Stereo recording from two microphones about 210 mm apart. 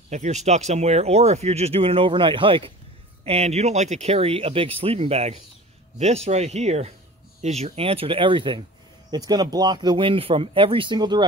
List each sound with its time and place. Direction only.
0.1 s speech: 35° right (ahead or behind)